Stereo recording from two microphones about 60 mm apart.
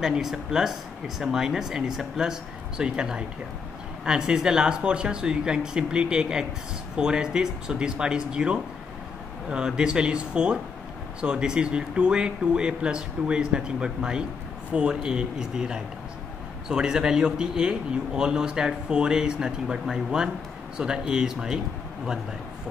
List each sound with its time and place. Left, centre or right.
0.0 s a man's voice: centre